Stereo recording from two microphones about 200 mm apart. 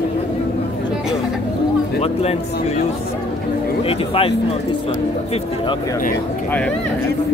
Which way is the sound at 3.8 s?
30° left (ahead or behind).